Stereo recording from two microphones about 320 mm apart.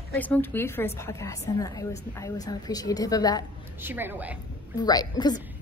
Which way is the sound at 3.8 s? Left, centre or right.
Centre.